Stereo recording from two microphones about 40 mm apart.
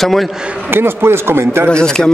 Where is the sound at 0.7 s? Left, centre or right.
Right.